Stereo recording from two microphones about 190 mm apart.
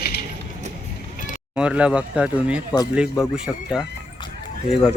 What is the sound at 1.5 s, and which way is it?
Speech, 5° right (ahead or behind).